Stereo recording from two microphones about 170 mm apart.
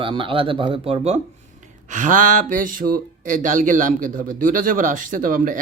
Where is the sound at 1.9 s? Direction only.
50° right (ahead or behind).